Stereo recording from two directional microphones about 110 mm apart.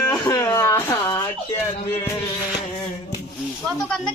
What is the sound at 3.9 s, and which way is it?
Speech, 5° left (ahead or behind).